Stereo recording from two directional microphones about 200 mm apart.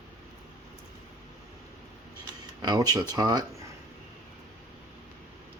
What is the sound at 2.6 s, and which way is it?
Speech, 20° right (ahead or behind).